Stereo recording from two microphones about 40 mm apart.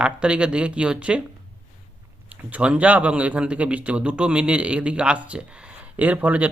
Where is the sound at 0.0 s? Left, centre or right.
Right.